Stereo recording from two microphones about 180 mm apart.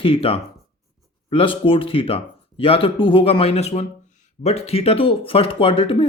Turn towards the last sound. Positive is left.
turn(degrees=30)  # may be behind; listen again after turning